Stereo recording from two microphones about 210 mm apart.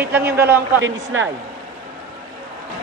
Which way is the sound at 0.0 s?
10° right (ahead or behind).